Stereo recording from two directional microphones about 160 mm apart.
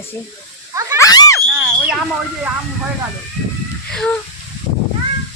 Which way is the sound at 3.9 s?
5° left (ahead or behind).